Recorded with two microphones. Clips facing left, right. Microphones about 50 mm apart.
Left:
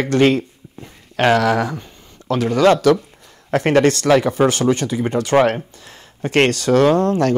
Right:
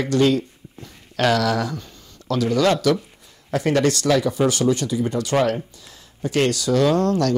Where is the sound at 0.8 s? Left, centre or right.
Left.